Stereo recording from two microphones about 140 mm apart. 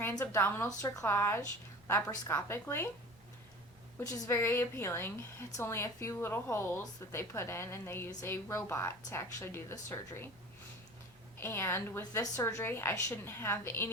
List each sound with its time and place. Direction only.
0.0 s a woman's voice: 15° left (ahead or behind)
4.1 s a woman's voice: 25° left (ahead or behind)
11.3 s speech: 20° left (ahead or behind)